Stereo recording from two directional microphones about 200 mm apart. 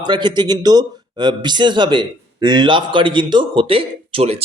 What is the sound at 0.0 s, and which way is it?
A man's voice, 25° right (ahead or behind).